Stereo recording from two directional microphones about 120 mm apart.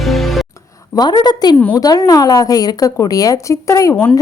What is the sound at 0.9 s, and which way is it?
A woman's voice, 35° left (ahead or behind).